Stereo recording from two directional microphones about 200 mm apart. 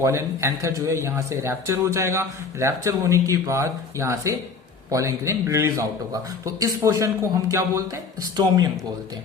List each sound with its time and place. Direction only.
0.0 s a man's voice: 15° right (ahead or behind)